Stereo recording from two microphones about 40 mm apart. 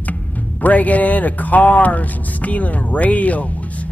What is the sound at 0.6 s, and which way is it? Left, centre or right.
Speech, left.